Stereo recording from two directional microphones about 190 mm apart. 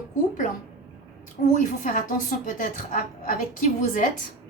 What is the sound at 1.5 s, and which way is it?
A woman's voice, 45° left (ahead or behind).